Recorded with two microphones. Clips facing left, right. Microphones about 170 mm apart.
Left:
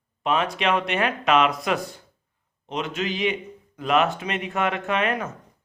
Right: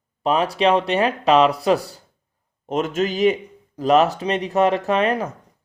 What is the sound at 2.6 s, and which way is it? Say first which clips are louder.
Speech: right 6 dB; 45° right (ahead or behind).